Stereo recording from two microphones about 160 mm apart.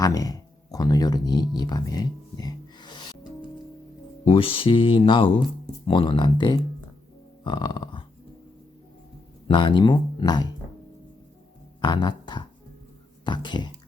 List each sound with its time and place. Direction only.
0.0 s speech: 20° left (ahead or behind)
4.3 s speech: 35° left (ahead or behind)
7.4 s burping: 30° left (ahead or behind)
9.5 s speech: 30° left (ahead or behind)
11.8 s speech: 25° left (ahead or behind)